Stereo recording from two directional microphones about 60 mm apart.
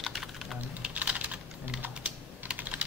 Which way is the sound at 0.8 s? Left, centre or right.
Right.